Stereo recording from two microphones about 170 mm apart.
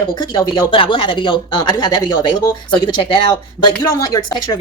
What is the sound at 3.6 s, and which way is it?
Speech, 25° left (ahead or behind).